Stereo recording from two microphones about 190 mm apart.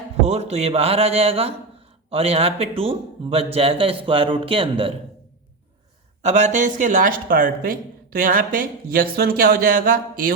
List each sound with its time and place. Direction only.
0.3 s speech: 35° right (ahead or behind)
6.2 s speech: 40° right (ahead or behind)